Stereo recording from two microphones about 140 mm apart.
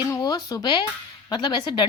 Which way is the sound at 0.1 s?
25° left (ahead or behind).